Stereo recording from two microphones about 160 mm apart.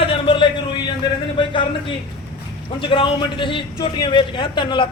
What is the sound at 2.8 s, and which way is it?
A man's voice, 30° left (ahead or behind).